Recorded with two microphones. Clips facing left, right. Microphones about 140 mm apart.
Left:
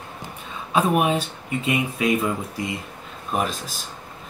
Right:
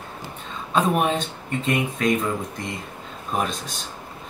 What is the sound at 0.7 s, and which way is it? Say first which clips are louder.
Speech: left 1 dB; 10° left (ahead or behind).